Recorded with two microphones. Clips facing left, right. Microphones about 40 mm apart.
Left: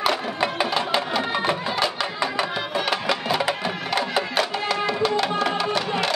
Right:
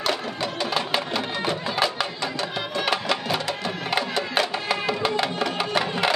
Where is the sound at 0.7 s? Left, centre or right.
Centre.